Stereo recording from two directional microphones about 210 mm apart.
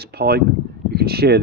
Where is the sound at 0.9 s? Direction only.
50° right (ahead or behind).